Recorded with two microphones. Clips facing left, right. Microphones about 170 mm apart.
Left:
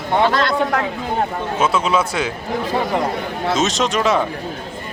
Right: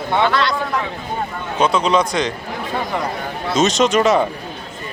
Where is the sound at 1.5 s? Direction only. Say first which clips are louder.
Right 2 dB; 5° left (ahead or behind).